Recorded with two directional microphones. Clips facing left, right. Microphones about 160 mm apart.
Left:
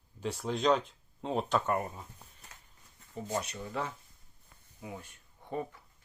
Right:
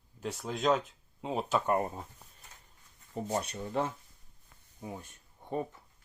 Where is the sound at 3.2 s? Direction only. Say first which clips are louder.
Right 1 dB; 30° right (ahead or behind).